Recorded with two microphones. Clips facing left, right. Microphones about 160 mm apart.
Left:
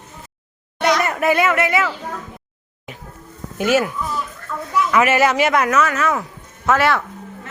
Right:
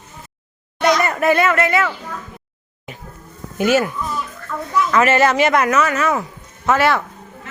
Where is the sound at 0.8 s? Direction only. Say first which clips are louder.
Right 2 dB; 65° left (ahead or behind).